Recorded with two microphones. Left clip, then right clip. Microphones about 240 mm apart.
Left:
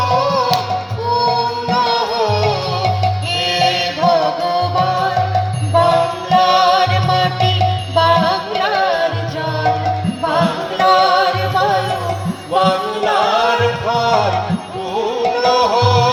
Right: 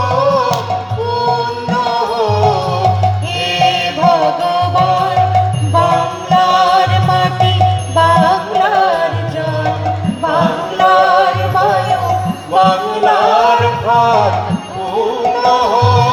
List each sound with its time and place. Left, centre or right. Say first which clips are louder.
2.1 s music: right 3 dB; centre
3.6 s music: right 5 dB; right
10.2 s music: right 3 dB; left
12.5 s music: right 4 dB; left